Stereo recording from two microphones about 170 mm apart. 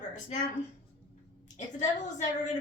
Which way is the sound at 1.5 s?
45° left (ahead or behind).